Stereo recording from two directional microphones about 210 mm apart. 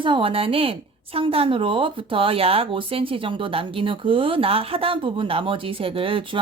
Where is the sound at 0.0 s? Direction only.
25° right (ahead or behind).